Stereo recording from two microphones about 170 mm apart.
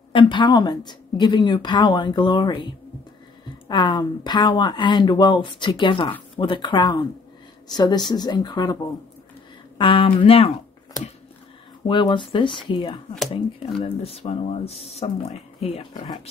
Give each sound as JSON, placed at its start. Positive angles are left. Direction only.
{"t": 0.1, "sound": "speech", "side_deg": 30}
{"t": 9.8, "sound": "speech", "side_deg": 30}
{"t": 11.9, "sound": "speech", "side_deg": 30}